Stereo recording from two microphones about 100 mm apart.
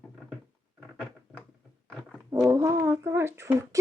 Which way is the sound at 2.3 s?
30° right (ahead or behind).